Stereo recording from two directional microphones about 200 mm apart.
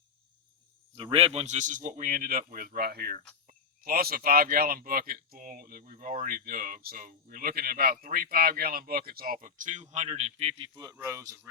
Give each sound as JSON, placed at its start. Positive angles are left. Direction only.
{"t": 0.9, "sound": "speech", "side_deg": -25}
{"t": 10.8, "sound": "speech", "side_deg": -15}